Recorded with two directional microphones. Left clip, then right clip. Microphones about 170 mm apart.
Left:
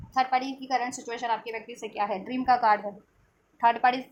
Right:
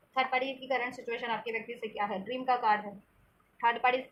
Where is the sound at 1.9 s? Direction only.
60° left (ahead or behind).